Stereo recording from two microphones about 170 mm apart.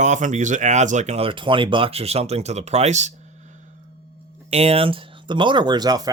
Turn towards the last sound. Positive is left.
turn(degrees=-25)  # may be behind; listen again after turning